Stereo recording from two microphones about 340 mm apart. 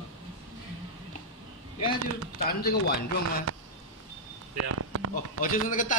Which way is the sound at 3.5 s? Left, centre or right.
Right.